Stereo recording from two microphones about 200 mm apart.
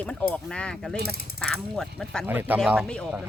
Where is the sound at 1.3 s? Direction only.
Centre (ahead or behind).